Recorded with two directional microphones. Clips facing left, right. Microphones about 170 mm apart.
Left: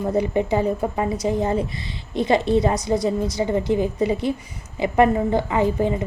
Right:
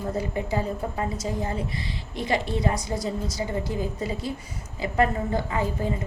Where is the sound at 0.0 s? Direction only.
20° left (ahead or behind).